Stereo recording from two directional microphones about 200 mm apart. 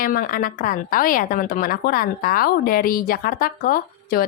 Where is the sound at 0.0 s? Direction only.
45° left (ahead or behind).